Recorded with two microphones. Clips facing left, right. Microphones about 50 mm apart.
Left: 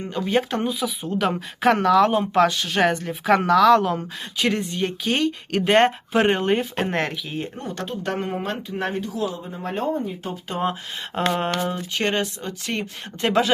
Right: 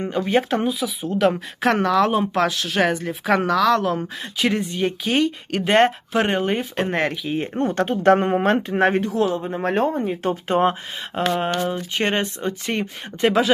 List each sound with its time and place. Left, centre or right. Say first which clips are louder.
0.1 s speech: right 1 dB; centre
7.3 s speech: right 8 dB; right
11.3 s speech: right 1 dB; centre
11.7 s speech: right 2 dB; right
13.2 s speech: right 2 dB; centre